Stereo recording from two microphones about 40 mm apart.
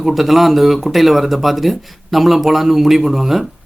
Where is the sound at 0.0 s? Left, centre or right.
Centre.